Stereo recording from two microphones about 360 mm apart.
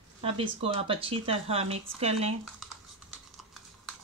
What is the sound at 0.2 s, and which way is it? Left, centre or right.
Speech, centre.